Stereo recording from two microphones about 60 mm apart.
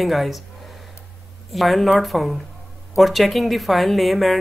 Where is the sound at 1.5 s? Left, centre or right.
Centre.